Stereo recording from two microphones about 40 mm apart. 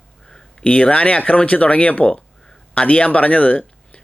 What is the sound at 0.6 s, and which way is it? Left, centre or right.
Speech, left.